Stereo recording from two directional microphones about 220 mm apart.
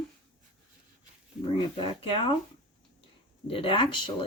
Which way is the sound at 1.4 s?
20° left (ahead or behind).